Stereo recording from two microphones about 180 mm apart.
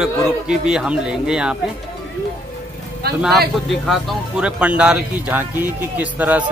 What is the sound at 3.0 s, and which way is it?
Speech, 60° right (ahead or behind).